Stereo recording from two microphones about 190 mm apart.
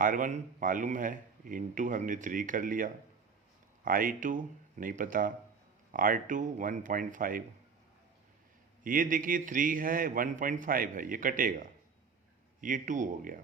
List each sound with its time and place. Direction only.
0.0 s a man's voice: 45° right (ahead or behind)
8.8 s a man's voice: 45° right (ahead or behind)